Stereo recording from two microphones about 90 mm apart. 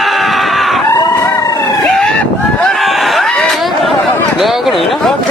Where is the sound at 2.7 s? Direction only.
Centre (ahead or behind).